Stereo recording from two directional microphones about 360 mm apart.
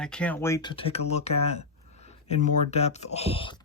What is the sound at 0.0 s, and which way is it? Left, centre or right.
Speech, centre.